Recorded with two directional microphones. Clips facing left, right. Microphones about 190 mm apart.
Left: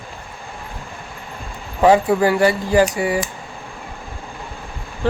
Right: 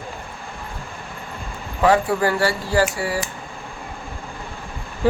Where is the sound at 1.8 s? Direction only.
20° left (ahead or behind).